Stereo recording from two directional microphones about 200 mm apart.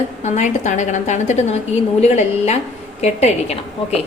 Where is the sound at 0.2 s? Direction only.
35° left (ahead or behind).